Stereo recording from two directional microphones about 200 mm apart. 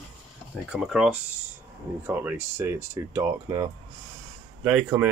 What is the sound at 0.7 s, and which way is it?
Speech, 5° right (ahead or behind).